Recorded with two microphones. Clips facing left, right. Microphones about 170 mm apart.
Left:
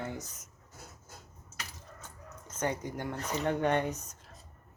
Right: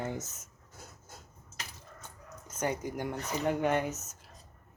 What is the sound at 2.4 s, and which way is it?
Speech, 10° right (ahead or behind).